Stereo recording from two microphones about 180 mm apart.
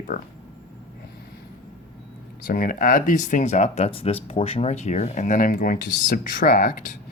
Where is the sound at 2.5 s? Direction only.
50° left (ahead or behind).